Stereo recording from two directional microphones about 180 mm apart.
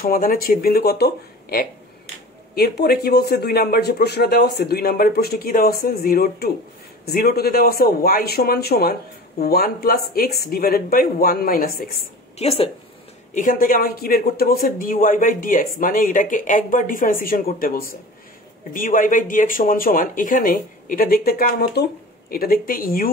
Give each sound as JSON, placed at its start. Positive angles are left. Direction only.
{"t": 0.0, "sound": "speech", "side_deg": 55}
{"t": 12.4, "sound": "speech", "side_deg": 35}
{"t": 13.3, "sound": "speech", "side_deg": 45}